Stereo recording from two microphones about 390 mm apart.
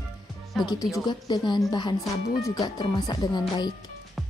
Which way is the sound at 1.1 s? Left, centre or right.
Centre.